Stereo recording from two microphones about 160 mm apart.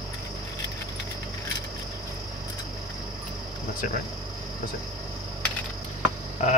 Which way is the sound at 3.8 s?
55° left (ahead or behind).